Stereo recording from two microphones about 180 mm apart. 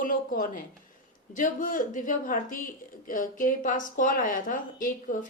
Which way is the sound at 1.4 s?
45° left (ahead or behind).